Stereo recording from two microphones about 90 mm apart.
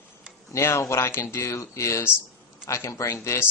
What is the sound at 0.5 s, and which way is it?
A man's voice, 35° left (ahead or behind).